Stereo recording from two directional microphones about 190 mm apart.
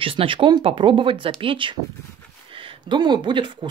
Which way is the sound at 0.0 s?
30° right (ahead or behind).